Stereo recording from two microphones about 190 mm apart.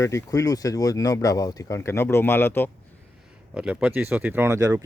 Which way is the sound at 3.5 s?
5° right (ahead or behind).